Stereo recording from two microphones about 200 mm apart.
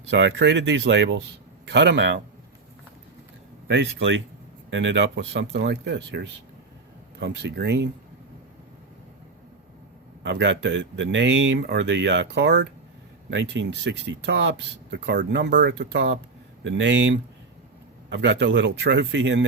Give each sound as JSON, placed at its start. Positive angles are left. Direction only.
{"t": 0.1, "sound": "speech", "side_deg": -60}
{"t": 3.7, "sound": "speech", "side_deg": -65}
{"t": 10.2, "sound": "speech", "side_deg": -60}